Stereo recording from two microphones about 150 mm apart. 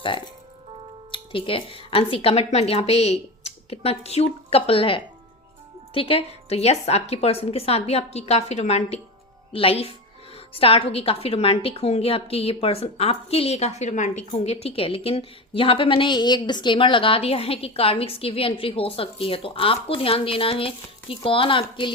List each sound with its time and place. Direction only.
1.1 s a woman's voice: 35° left (ahead or behind)